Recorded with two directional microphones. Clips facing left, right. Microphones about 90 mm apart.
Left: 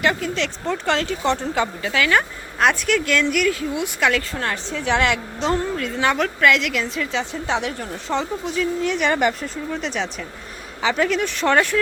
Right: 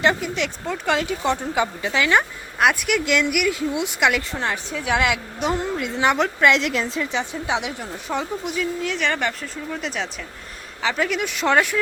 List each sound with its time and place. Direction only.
0.0 s a woman's voice: 20° right (ahead or behind)
2.6 s a woman's voice: 10° right (ahead or behind)
4.7 s a woman's voice: 5° right (ahead or behind); by 7.1 s 30° right (ahead or behind)
7.1 s a woman's voice: 15° right (ahead or behind)
8.4 s speech: 5° right (ahead or behind)
11.2 s a woman's voice: 10° right (ahead or behind)